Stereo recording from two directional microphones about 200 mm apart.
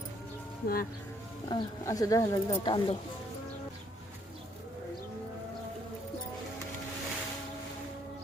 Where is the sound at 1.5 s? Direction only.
15° left (ahead or behind).